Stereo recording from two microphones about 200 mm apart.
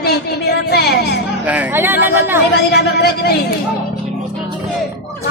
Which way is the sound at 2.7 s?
55° left (ahead or behind).